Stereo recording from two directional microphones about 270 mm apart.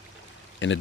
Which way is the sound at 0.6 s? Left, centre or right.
Left.